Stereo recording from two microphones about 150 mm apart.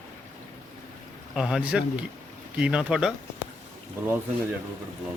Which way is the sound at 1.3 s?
5° right (ahead or behind).